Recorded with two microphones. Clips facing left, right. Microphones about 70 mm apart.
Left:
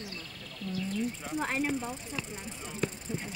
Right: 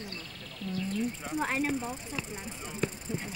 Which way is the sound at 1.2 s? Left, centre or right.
Centre.